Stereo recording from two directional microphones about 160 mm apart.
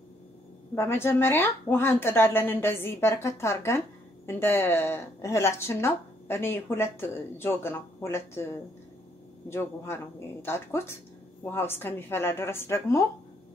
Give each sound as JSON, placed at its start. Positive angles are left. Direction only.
{"t": 0.7, "sound": "speech", "side_deg": 15}
{"t": 9.5, "sound": "speech", "side_deg": 15}